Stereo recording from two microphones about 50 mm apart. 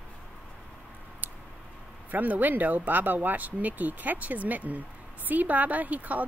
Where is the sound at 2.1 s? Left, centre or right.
Right.